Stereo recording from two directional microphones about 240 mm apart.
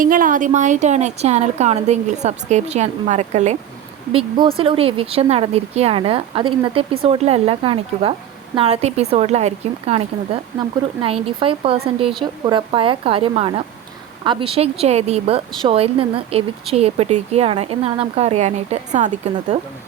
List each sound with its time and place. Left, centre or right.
0.0 s a woman's voice: right